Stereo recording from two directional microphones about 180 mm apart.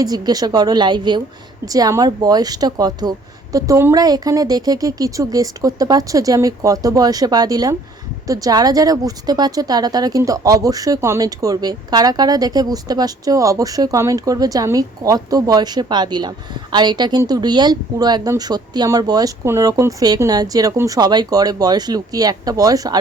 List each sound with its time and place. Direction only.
0.0 s speech: 20° right (ahead or behind)